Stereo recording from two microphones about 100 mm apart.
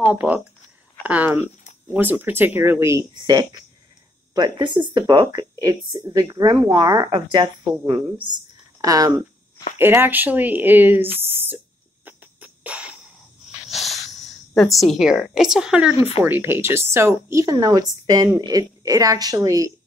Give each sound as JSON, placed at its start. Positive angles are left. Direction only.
{"t": 0.1, "sound": "speech", "side_deg": -15}
{"t": 4.3, "sound": "a woman's voice", "side_deg": -45}
{"t": 7.1, "sound": "a woman's voice", "side_deg": -55}
{"t": 8.8, "sound": "speech", "side_deg": -40}
{"t": 9.8, "sound": "a sound", "side_deg": -20}
{"t": 13.7, "sound": "a sound", "side_deg": 0}
{"t": 16.3, "sound": "speech", "side_deg": -20}